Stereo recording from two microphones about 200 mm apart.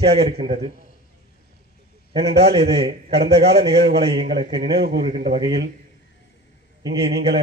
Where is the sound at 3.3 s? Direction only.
55° right (ahead or behind).